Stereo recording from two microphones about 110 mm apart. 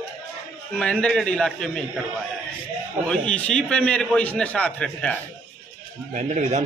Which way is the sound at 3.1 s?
10° left (ahead or behind).